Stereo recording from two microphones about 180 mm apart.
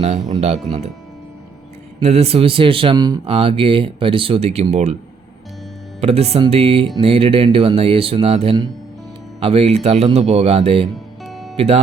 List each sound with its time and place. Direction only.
0.0 s speech: 40° right (ahead or behind)
2.0 s speech: 35° right (ahead or behind)
6.0 s speech: 35° right (ahead or behind)
10.9 s music: centre (ahead or behind)
11.5 s speech: 35° right (ahead or behind)